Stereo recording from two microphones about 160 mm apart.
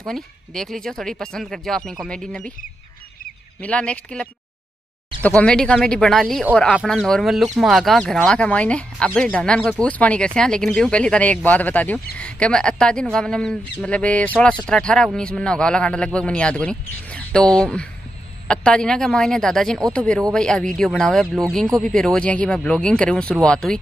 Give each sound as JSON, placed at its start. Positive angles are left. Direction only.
{"t": 0.0, "sound": "speech", "side_deg": 5}
{"t": 3.6, "sound": "speech", "side_deg": 5}